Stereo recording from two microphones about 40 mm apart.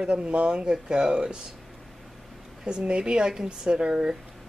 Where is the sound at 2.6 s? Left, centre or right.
Right.